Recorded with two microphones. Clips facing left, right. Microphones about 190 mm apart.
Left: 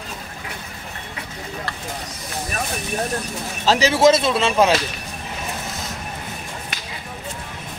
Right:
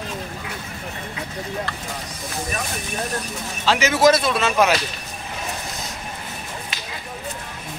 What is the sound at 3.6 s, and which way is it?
A man's voice, 35° left (ahead or behind).